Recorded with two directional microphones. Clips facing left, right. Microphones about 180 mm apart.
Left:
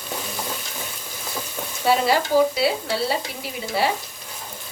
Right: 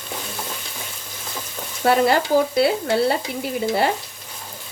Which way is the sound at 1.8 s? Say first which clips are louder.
Right 3 dB; 55° right (ahead or behind).